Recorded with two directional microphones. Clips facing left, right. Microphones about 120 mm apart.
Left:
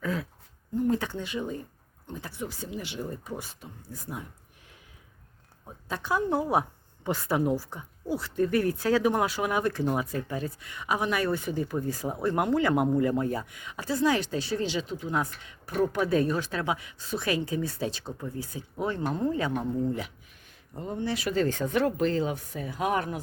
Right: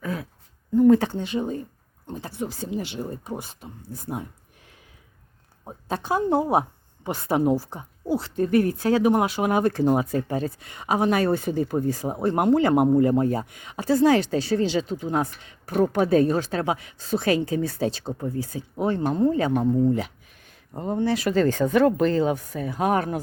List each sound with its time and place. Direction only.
0.0 s a sound: 20° right (ahead or behind)
0.9 s speech: 30° right (ahead or behind)
5.6 s speech: 30° right (ahead or behind)
13.0 s speech: 35° right (ahead or behind)
19.0 s speech: 20° right (ahead or behind)
20.7 s speech: 40° right (ahead or behind)
21.3 s speech: 55° right (ahead or behind)